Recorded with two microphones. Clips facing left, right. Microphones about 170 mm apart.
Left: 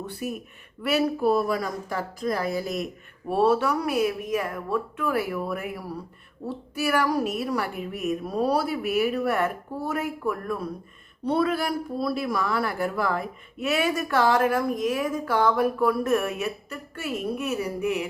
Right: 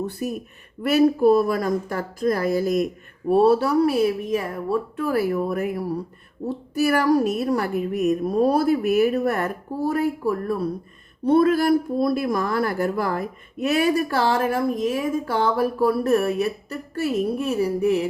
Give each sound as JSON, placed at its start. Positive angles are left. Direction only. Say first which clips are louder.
{"t": 0.0, "sound": "a woman's voice", "louder": "right 5 dB", "side_deg": -40}
{"t": 11.2, "sound": "speech", "louder": "right 7 dB", "side_deg": -50}